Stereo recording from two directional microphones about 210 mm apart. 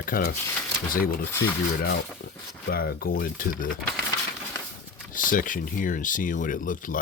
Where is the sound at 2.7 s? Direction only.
45° left (ahead or behind).